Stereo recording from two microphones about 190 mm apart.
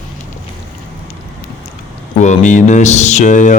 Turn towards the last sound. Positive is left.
turn(degrees=40)  # may be behind; listen again after turning